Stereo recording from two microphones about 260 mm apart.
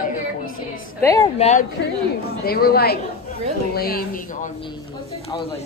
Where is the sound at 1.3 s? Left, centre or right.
Left.